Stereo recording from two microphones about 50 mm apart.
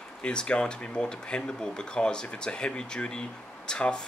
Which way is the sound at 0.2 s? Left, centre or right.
Centre.